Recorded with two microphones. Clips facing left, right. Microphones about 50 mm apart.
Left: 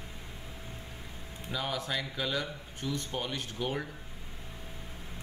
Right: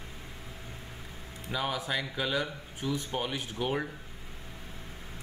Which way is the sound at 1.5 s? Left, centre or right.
Centre.